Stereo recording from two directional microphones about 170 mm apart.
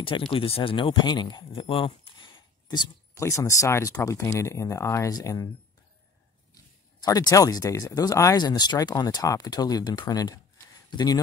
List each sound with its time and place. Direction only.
0.0 s speech: 30° left (ahead or behind)
6.5 s speech: 20° left (ahead or behind)